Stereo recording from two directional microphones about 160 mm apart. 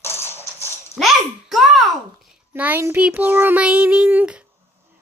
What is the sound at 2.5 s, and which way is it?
Child singing, 10° right (ahead or behind).